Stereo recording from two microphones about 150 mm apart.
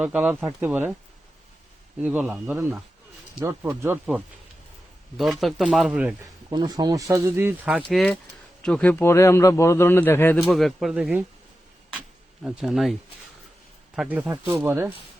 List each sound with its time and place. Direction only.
0.0 s speech: 10° right (ahead or behind)
2.0 s speech: 10° right (ahead or behind)
3.4 s speech: 15° right (ahead or behind)
6.5 s speech: 25° right (ahead or behind)
7.9 s a man's voice: 5° left (ahead or behind)
10.4 s speech: centre (ahead or behind)
12.5 s speech: centre (ahead or behind)